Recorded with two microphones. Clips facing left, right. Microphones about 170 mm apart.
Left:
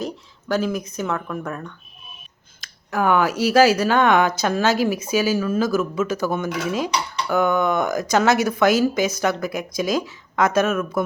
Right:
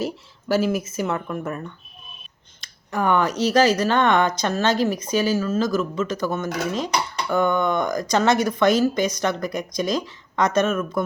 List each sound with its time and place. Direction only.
0.0 s speech: 5° right (ahead or behind)